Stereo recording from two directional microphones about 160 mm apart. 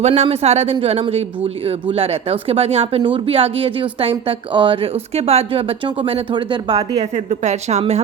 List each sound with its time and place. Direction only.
0.0 s speech: 40° right (ahead or behind)
7.0 s speech: 45° right (ahead or behind)